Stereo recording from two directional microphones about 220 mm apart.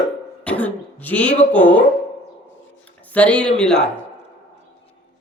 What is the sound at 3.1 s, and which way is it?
Speech, 5° left (ahead or behind).